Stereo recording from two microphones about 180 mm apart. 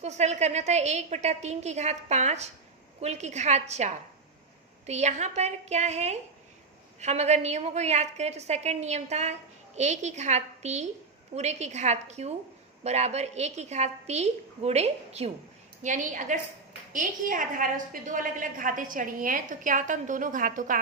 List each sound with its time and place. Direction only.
0.0 s a woman's voice: 40° right (ahead or behind)